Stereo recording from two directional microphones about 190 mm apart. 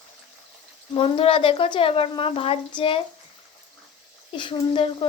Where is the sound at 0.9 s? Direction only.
30° left (ahead or behind).